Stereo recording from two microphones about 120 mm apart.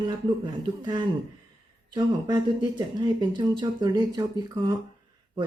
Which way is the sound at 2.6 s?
40° right (ahead or behind).